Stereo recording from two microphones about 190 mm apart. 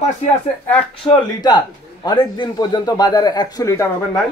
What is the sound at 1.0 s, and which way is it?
Speech, 25° left (ahead or behind).